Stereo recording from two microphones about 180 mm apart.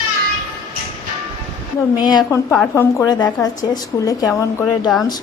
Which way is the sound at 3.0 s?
20° left (ahead or behind).